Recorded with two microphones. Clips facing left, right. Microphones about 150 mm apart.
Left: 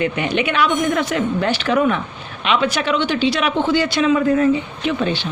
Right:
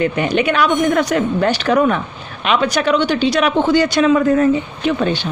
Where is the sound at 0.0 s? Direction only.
40° right (ahead or behind).